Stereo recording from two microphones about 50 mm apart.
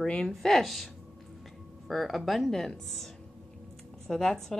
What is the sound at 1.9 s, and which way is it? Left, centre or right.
Speech, centre.